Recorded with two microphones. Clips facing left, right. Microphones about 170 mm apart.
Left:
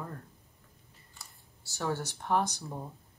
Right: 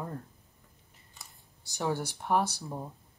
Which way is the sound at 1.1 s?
15° right (ahead or behind).